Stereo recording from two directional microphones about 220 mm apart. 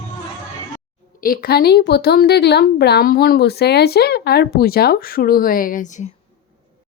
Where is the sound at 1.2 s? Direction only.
40° left (ahead or behind).